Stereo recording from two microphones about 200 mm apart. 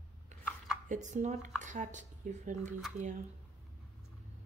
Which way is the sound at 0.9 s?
35° right (ahead or behind).